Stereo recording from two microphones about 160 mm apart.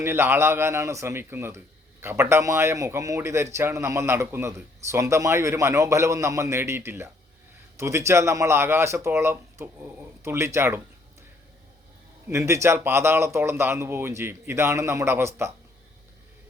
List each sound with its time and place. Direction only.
0.0 s speech: 15° right (ahead or behind)
12.3 s speech: 15° right (ahead or behind)